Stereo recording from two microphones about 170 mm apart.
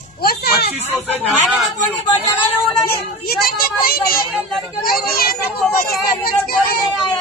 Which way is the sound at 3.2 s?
65° left (ahead or behind).